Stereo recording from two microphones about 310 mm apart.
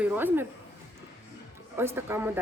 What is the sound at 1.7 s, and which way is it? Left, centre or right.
Speech, centre.